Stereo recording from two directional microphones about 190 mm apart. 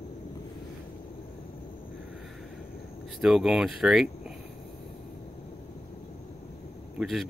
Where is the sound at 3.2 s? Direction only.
Centre (ahead or behind).